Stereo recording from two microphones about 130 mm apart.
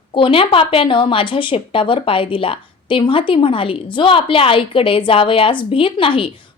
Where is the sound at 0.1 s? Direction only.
40° left (ahead or behind).